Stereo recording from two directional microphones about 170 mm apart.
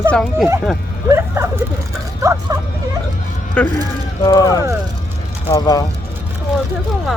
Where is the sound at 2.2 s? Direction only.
20° right (ahead or behind).